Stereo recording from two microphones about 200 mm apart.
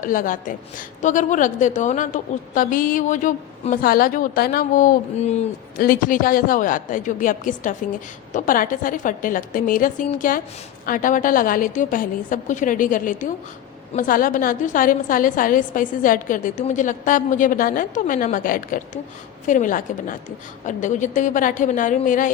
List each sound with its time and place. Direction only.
0.0 s a woman's voice: 45° left (ahead or behind)
5.2 s a woman's voice: 35° left (ahead or behind)
5.7 s a woman's voice: 45° left (ahead or behind)